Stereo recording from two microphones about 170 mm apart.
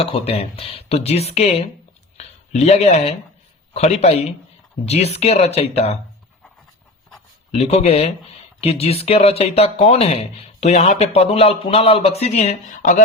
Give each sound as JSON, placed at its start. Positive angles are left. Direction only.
{"t": 0.0, "sound": "speech", "side_deg": 35}
{"t": 7.5, "sound": "speech", "side_deg": 40}